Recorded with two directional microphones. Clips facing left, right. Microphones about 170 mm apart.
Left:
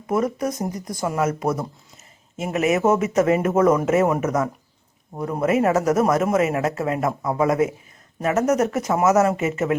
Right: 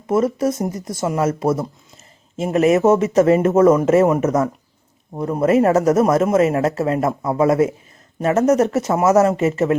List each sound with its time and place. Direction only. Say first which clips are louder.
0.1 s speech: right 5 dB; 25° right (ahead or behind)